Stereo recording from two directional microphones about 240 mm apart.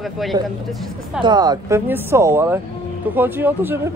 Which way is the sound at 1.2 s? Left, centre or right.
Centre.